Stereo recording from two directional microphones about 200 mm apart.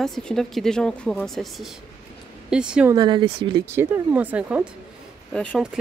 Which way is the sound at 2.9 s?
20° right (ahead or behind).